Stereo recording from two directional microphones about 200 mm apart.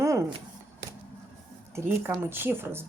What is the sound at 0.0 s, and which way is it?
Shuffling cards, 15° right (ahead or behind).